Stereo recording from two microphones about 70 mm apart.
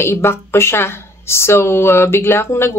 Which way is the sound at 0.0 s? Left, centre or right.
Left.